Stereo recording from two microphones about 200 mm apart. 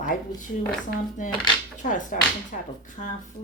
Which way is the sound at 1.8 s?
40° left (ahead or behind).